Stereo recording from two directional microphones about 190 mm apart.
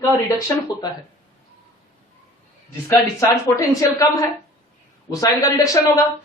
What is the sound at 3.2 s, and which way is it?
Speech, 15° left (ahead or behind).